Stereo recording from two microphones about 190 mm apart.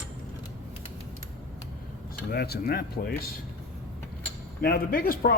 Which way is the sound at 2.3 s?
55° left (ahead or behind).